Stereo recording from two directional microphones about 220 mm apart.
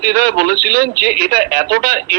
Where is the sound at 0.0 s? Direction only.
45° right (ahead or behind).